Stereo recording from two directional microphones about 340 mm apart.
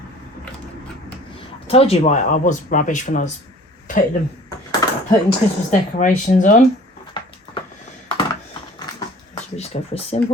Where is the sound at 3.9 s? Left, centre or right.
Left.